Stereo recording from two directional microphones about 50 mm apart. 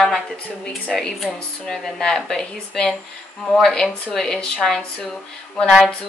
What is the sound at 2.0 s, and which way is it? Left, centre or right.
Speech, centre.